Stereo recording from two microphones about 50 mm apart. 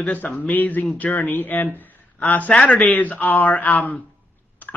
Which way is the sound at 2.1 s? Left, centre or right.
Left.